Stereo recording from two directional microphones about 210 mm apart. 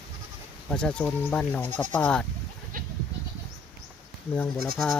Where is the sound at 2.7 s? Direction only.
40° right (ahead or behind).